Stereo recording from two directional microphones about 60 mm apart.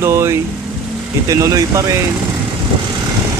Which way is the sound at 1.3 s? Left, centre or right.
Right.